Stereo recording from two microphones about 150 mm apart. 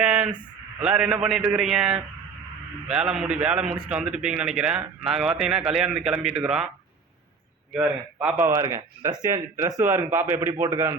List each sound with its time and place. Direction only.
0.0 s a sound: 5° right (ahead or behind)
0.8 s a man's voice: 5° right (ahead or behind)
7.7 s a man's voice: 5° right (ahead or behind)